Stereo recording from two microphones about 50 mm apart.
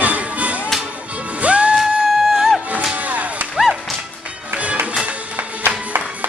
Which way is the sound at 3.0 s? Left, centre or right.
Right.